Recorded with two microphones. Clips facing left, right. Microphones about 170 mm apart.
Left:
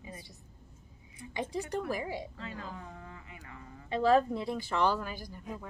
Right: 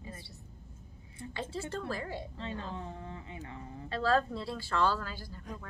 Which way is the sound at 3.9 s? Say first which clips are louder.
Left 4 dB; 15° left (ahead or behind).